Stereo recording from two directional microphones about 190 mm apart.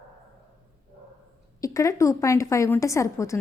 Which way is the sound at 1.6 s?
15° left (ahead or behind).